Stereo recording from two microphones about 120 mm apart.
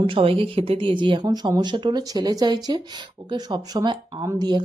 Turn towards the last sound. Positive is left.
turn(degrees=-25)  # may be behind; listen again after turning